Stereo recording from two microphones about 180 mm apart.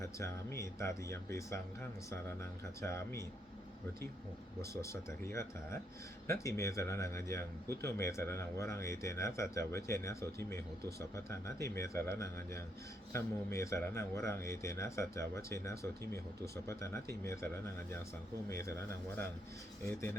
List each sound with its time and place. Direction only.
0.2 s speech: 15° left (ahead or behind)
4.7 s speech: 15° left (ahead or behind)